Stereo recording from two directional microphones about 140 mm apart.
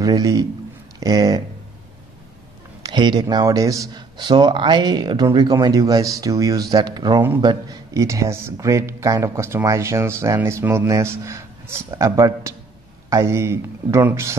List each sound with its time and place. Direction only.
0.0 s speech: 25° right (ahead or behind)
2.8 s speech: 30° right (ahead or behind)